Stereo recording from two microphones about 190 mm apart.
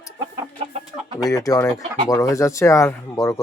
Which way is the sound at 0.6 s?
30° right (ahead or behind).